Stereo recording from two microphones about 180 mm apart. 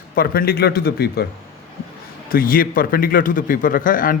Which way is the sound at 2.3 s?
55° left (ahead or behind).